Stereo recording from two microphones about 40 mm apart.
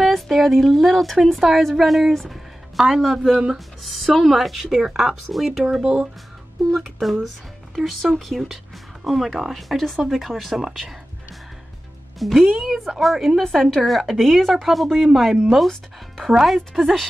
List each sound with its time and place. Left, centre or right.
0.0 s speech: centre
3.3 s speech: centre
3.5 s speech: centre
4.8 s speech: centre
5.8 s speech: right
6.7 s speech: centre
12.4 s speech: centre
13.4 s a woman's voice: centre
13.8 s speech: centre